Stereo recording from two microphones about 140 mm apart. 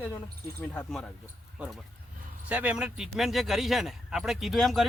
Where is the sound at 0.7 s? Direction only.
5° left (ahead or behind).